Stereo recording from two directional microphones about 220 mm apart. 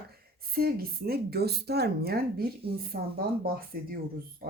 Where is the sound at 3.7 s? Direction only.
40° right (ahead or behind).